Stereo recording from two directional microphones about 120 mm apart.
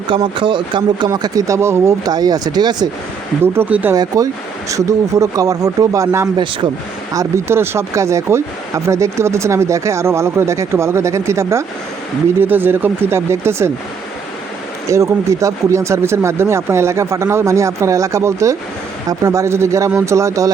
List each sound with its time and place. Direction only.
0.3 s speech: 45° right (ahead or behind)
3.4 s speech: 20° right (ahead or behind)
3.9 s speech: 30° right (ahead or behind)
14.8 s speech: 25° right (ahead or behind)